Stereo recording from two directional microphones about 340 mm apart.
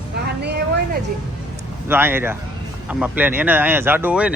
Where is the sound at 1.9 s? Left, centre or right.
Centre.